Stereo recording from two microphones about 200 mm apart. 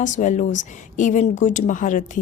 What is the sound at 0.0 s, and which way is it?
A woman's voice, 40° left (ahead or behind).